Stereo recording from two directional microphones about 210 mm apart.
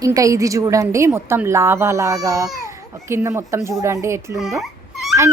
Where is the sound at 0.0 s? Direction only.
15° right (ahead or behind).